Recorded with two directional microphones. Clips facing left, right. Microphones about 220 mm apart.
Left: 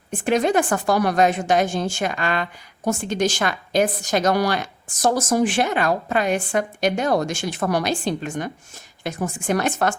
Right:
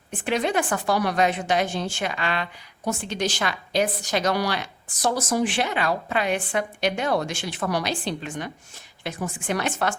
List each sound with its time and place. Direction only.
0.1 s a woman's voice: 45° left (ahead or behind)